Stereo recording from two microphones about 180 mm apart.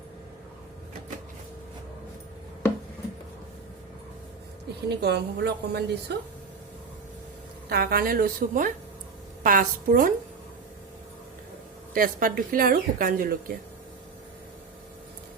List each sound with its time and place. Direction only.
4.9 s a woman's voice: 65° right (ahead or behind)
7.7 s speech: 55° right (ahead or behind)
11.9 s speech: 50° right (ahead or behind)